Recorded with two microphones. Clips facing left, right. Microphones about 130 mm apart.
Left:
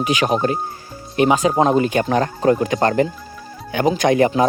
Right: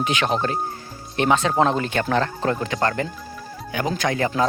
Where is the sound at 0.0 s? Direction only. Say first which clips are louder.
Left 4 dB; 10° left (ahead or behind).